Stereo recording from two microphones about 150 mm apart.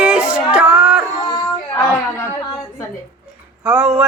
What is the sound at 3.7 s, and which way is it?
Speech, 5° right (ahead or behind).